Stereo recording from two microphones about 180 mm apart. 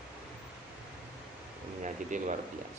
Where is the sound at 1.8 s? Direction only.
45° right (ahead or behind).